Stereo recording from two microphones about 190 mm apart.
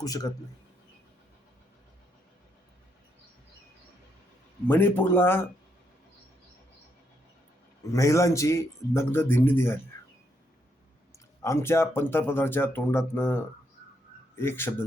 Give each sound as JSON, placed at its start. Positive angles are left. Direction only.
{"t": 0.0, "sound": "a man's voice", "side_deg": 20}
{"t": 4.7, "sound": "speech", "side_deg": 10}
{"t": 7.9, "sound": "speech", "side_deg": 15}
{"t": 11.4, "sound": "speech", "side_deg": 15}